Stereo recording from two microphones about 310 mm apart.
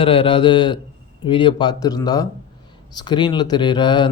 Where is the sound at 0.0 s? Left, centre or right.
Centre.